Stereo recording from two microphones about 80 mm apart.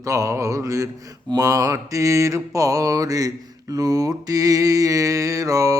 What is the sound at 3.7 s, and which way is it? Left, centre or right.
Speech, right.